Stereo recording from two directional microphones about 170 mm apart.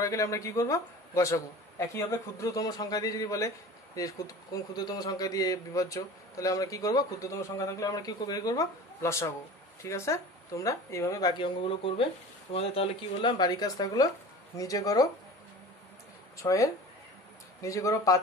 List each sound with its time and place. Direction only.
0.0 s speech: 20° left (ahead or behind)
16.3 s speech: 20° left (ahead or behind)